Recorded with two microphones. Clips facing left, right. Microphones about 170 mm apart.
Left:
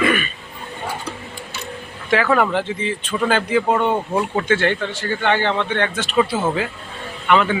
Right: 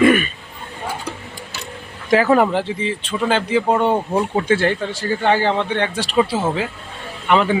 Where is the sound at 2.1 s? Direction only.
30° right (ahead or behind).